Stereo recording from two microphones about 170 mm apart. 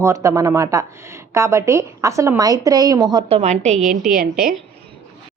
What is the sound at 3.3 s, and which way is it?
Speech, 40° right (ahead or behind).